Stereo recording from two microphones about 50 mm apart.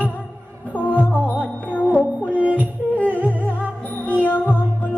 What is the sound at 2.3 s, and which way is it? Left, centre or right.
Music, right.